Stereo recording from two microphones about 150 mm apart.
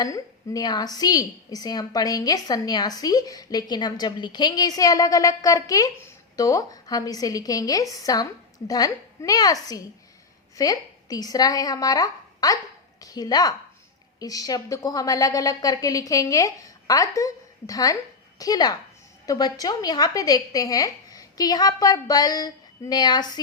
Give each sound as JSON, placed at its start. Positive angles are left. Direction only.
{"t": 0.0, "sound": "a woman's voice", "side_deg": 25}